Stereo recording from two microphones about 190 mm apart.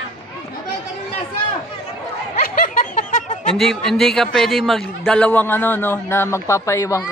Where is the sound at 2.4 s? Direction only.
45° left (ahead or behind).